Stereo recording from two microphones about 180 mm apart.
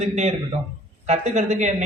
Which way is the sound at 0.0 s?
40° right (ahead or behind).